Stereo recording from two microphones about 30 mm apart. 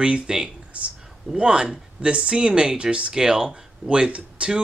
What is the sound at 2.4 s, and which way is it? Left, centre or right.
Speech, right.